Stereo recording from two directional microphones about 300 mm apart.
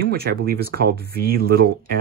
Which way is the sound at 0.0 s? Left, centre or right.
Right.